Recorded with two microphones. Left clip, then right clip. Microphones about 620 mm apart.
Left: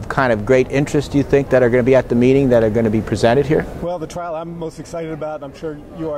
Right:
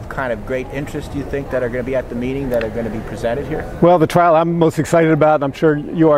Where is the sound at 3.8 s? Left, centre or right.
Right.